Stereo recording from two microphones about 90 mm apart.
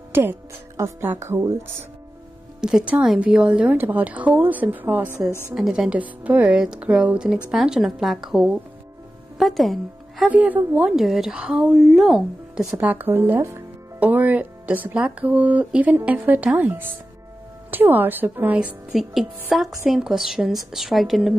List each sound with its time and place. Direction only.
0.1 s speech: 25° right (ahead or behind)
2.6 s a woman's voice: 10° right (ahead or behind)
5.5 s a woman's voice: 5° right (ahead or behind)
10.3 s a woman's voice: 15° right (ahead or behind)
10.9 s speech: 5° right (ahead or behind)
12.8 s a woman's voice: 20° right (ahead or behind)
17.6 s a woman's voice: 20° right (ahead or behind)
18.9 s speech: centre (ahead or behind)